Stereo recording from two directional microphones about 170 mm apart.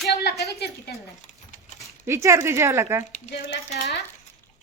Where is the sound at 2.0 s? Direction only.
15° right (ahead or behind).